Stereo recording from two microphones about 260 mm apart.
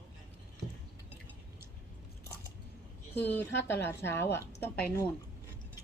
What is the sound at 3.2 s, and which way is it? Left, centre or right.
Speech, centre.